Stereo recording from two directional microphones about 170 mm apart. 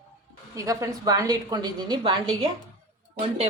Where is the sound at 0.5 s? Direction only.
20° right (ahead or behind).